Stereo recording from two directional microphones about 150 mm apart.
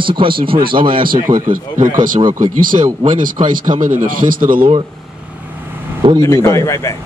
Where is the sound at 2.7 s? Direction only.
35° right (ahead or behind).